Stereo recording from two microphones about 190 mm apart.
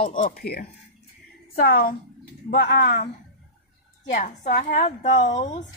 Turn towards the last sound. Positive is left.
turn(degrees=40)  # may be behind; listen again after turning